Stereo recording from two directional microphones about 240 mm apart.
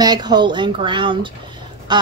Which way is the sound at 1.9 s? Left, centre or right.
Centre.